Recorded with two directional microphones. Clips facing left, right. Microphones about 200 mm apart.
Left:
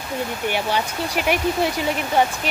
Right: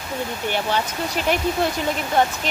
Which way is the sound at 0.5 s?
10° left (ahead or behind).